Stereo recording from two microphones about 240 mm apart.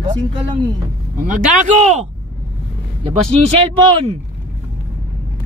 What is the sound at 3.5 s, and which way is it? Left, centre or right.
Speech, right.